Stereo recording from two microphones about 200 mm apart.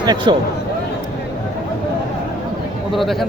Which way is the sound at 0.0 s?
20° right (ahead or behind).